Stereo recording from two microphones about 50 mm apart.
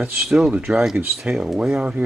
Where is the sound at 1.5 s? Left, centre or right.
Centre.